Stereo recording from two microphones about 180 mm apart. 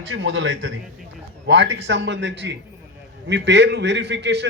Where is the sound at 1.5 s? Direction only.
75° right (ahead or behind).